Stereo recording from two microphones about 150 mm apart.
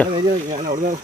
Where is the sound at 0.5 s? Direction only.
60° right (ahead or behind).